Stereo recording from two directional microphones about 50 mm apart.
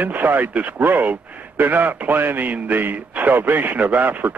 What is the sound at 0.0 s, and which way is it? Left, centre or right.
A man's voice, right.